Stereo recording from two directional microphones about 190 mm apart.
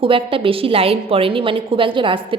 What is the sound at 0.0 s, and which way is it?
A woman's voice, 30° right (ahead or behind).